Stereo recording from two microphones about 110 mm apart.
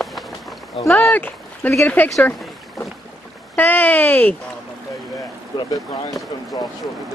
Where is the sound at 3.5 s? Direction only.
15° left (ahead or behind).